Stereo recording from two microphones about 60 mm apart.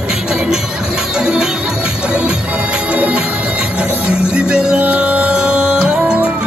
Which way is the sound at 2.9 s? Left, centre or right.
Right.